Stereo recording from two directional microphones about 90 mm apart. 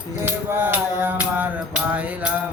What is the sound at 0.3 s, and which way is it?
Music, 25° right (ahead or behind).